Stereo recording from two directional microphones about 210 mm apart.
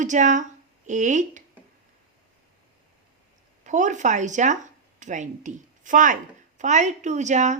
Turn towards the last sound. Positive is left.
turn(degrees=-35)  # may be behind; listen again after turning